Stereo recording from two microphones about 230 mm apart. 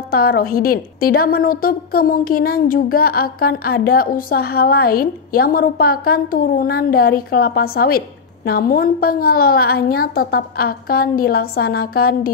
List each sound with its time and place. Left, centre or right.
0.1 s a woman's voice: left